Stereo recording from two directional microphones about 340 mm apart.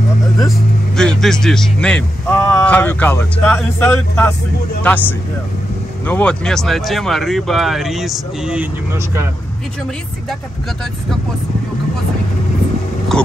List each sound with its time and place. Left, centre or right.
0.5 s speech: centre
13.1 s dog: centre